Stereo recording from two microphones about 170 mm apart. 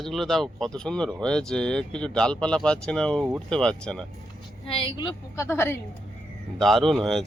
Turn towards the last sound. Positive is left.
turn(degrees=0)  # may be behind; listen again after turning